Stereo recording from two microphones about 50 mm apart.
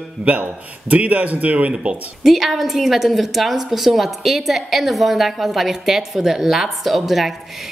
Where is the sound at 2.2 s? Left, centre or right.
Centre.